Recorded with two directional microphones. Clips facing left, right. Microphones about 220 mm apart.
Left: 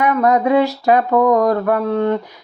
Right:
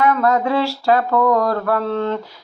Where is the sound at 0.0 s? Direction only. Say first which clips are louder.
Left 2 dB; 20° left (ahead or behind).